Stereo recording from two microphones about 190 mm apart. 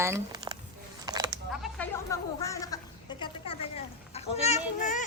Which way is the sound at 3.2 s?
30° left (ahead or behind).